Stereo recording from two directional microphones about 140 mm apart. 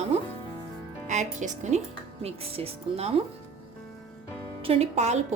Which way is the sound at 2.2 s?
45° right (ahead or behind).